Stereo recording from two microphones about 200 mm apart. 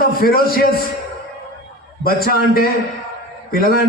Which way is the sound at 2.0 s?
50° left (ahead or behind).